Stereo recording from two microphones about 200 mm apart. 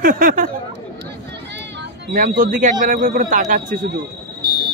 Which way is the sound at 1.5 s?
60° right (ahead or behind).